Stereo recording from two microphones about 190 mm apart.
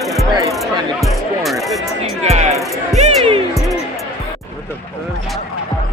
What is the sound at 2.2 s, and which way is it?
Music, 35° right (ahead or behind).